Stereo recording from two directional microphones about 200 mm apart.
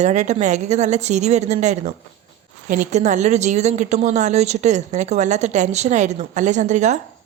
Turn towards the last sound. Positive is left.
turn(degrees=-35)  # may be behind; listen again after turning